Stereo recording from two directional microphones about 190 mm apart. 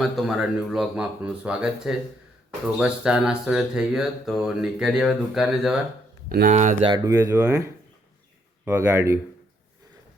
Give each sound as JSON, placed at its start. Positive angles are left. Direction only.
{"t": 0.0, "sound": "speech", "side_deg": 0}
{"t": 6.2, "sound": "speech", "side_deg": -50}
{"t": 6.8, "sound": "speech", "side_deg": -20}